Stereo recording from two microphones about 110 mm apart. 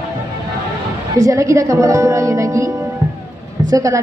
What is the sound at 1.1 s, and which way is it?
Speech, 30° right (ahead or behind).